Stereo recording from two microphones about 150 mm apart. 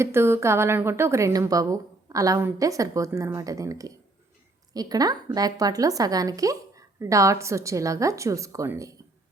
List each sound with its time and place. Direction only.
0.0 s a woman's voice: 15° right (ahead or behind)